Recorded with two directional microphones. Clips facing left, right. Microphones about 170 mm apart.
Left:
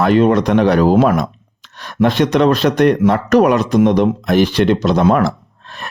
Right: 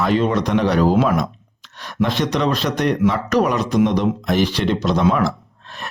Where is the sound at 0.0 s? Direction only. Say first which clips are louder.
Left 6 dB; 55° left (ahead or behind).